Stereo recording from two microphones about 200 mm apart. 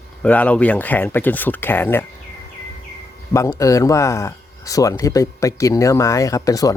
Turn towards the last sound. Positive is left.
turn(degrees=15)  # may be behind; listen again after turning